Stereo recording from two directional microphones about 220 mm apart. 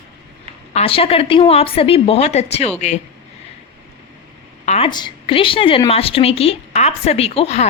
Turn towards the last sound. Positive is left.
turn(degrees=30)  # may be behind; listen again after turning